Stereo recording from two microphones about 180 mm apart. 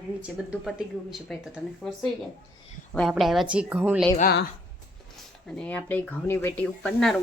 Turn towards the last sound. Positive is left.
turn(degrees=5)  # may be behind; listen again after turning